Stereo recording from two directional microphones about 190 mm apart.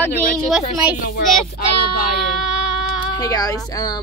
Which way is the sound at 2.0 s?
55° left (ahead or behind).